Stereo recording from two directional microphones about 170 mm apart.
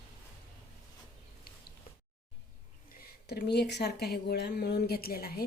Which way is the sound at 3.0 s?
70° left (ahead or behind).